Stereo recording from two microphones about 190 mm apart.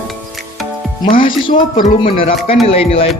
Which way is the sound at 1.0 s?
25° left (ahead or behind).